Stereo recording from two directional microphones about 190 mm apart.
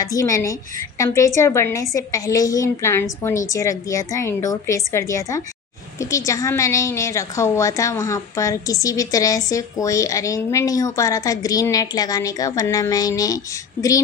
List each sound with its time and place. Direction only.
0.0 s a woman's voice: 20° left (ahead or behind)